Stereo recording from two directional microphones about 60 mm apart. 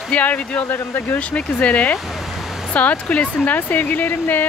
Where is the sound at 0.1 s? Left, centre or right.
Left.